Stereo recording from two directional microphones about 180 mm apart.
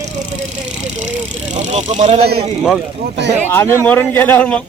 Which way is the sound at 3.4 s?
15° left (ahead or behind).